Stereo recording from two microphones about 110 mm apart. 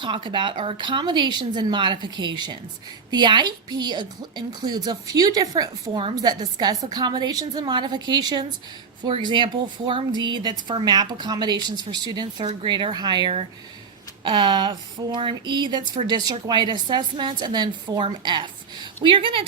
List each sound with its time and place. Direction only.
0.0 s a woman's voice: 45° right (ahead or behind)